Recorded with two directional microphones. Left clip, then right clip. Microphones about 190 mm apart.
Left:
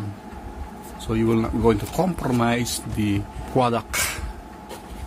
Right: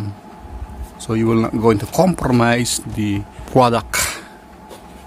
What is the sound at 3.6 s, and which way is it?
Speech, 30° right (ahead or behind).